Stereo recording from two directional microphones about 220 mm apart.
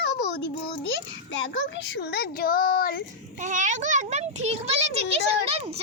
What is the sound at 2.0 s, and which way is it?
Speech, 45° left (ahead or behind).